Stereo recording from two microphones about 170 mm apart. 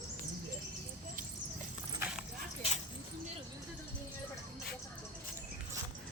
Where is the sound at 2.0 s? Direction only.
5° right (ahead or behind).